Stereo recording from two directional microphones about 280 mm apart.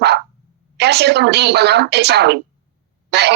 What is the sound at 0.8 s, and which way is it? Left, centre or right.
A woman's voice, right.